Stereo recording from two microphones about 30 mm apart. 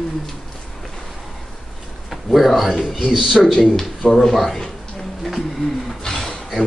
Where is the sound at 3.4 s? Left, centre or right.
Centre.